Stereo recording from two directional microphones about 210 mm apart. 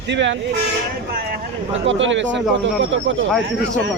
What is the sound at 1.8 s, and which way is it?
Speech, 60° right (ahead or behind).